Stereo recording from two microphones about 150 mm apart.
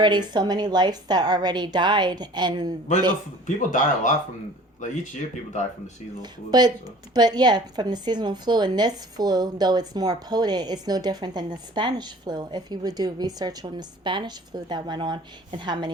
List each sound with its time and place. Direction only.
0.0 s speech: 30° right (ahead or behind)
3.4 s speech: 55° left (ahead or behind)
6.5 s speech: 25° right (ahead or behind)